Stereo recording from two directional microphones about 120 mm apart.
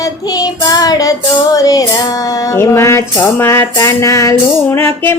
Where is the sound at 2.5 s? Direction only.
25° left (ahead or behind).